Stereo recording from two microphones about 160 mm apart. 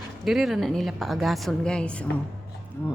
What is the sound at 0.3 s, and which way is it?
A woman's voice, centre (ahead or behind).